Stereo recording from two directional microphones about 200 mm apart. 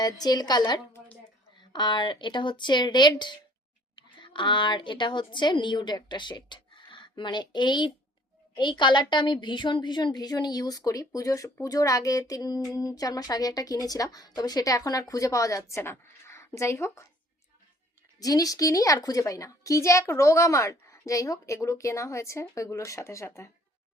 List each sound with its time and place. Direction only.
0.0 s a woman's voice: 20° left (ahead or behind)
18.2 s a woman's voice: 15° left (ahead or behind)